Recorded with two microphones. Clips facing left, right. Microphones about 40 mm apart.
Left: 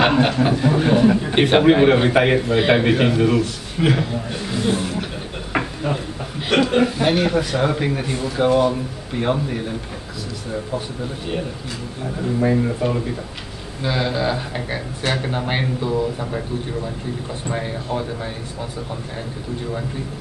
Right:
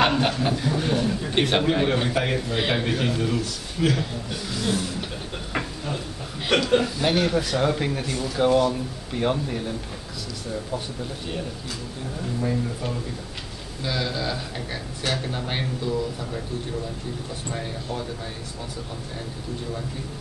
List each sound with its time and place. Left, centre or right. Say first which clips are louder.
0.0 s a man's voice: left 5 dB; centre
5.5 s a sound: left 8 dB; left
6.8 s a man's voice: left 5 dB; left
12.4 s a man's voice: left 9 dB; left
17.5 s a man's voice: left 7 dB; left